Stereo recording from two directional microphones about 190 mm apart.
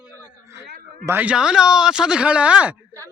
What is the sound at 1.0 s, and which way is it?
Speech, 10° right (ahead or behind).